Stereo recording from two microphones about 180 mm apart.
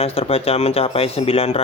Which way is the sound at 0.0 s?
35° left (ahead or behind).